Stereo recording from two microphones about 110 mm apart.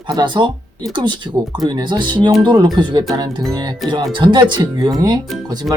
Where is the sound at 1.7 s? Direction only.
40° right (ahead or behind).